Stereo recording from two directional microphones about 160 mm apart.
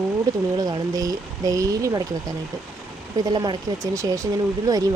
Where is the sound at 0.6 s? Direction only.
25° right (ahead or behind).